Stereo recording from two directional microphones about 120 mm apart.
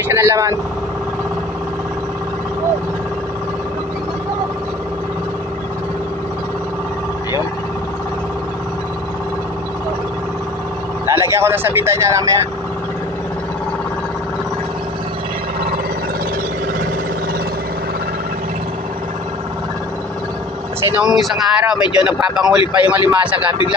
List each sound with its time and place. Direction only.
0.1 s speech: 20° right (ahead or behind)
11.1 s speech: 25° right (ahead or behind)
20.9 s speech: 5° right (ahead or behind)